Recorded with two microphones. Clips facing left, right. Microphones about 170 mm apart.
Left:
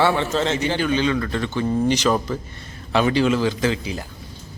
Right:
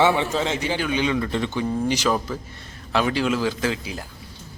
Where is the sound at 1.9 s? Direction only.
5° right (ahead or behind).